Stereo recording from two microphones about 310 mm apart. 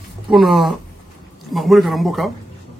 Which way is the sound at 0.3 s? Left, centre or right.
Centre.